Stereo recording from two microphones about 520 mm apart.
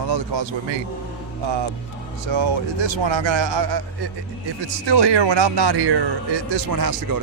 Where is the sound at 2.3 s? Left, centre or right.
Right.